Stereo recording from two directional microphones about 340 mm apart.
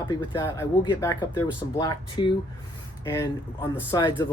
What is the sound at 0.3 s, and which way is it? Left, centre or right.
Speech, centre.